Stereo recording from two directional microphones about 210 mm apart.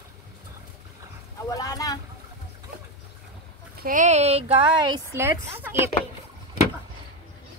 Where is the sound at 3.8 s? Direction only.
40° right (ahead or behind); by 5.0 s 25° right (ahead or behind).